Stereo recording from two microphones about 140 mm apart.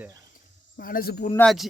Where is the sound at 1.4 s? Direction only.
Centre (ahead or behind).